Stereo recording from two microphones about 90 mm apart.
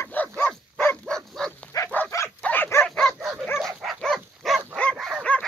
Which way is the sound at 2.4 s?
15° left (ahead or behind).